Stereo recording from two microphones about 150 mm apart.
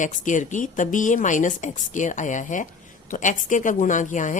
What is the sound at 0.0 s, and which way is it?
A woman's voice, 55° left (ahead or behind).